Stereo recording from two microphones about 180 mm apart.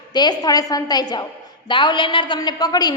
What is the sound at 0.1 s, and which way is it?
A woman's voice, 25° left (ahead or behind).